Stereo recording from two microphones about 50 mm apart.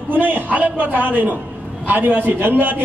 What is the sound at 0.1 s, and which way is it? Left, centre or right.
A man's voice, right.